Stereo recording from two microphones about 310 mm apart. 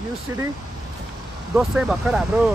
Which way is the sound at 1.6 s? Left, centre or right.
Centre.